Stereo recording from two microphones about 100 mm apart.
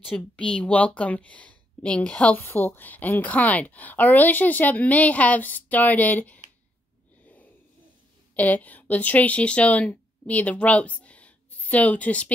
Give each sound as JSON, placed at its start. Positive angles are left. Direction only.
{"t": 0.1, "sound": "a woman's voice", "side_deg": 10}
{"t": 8.4, "sound": "speech", "side_deg": 15}